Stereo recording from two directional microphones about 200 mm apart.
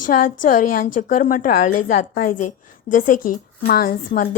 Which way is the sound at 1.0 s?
40° left (ahead or behind).